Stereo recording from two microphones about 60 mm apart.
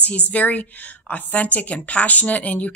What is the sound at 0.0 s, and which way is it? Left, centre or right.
A woman's voice, left.